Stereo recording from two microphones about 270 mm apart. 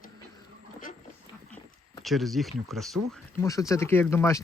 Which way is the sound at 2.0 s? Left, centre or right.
Centre.